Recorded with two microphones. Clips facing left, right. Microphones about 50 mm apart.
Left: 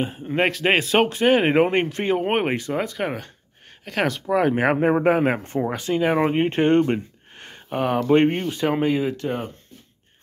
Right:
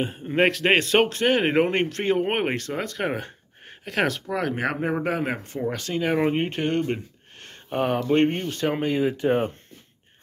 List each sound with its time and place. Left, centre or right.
0.0 s speech: centre
4.4 s speech: left
5.7 s speech: centre
6.5 s speech: left
7.3 s a sound: centre
7.7 s speech: centre
8.1 s speech: centre